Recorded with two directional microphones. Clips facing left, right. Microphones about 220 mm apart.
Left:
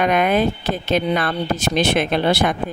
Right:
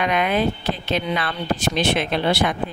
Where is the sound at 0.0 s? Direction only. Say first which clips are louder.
Left 3 dB; 45° left (ahead or behind).